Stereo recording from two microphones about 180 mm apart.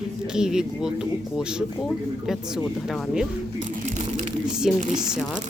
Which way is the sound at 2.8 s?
Centre (ahead or behind).